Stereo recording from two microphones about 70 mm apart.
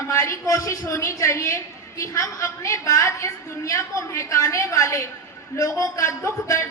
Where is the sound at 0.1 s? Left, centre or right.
Left.